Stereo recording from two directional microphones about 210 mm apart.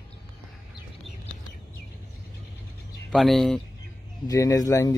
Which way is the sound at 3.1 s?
Centre (ahead or behind).